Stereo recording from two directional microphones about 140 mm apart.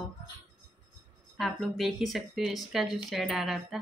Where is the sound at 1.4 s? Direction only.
Centre (ahead or behind).